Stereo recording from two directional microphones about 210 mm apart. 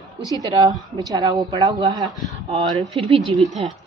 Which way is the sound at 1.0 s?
20° right (ahead or behind).